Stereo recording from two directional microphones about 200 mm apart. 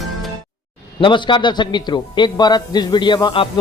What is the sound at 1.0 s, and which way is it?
A man's voice, 25° left (ahead or behind).